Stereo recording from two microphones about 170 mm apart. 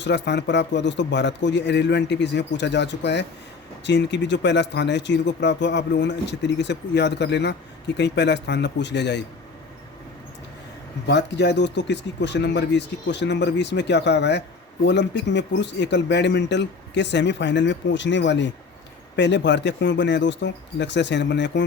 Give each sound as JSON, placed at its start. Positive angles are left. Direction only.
{"t": 0.0, "sound": "speech", "side_deg": 90}
{"t": 11.0, "sound": "speech", "side_deg": 90}